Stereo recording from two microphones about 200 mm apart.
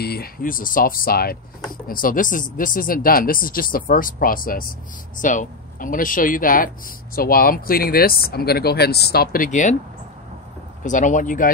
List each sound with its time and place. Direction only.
0.0 s speech: 50° left (ahead or behind)
10.8 s speech: 40° left (ahead or behind)